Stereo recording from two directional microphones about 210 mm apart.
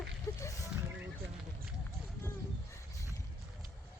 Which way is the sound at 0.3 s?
15° left (ahead or behind).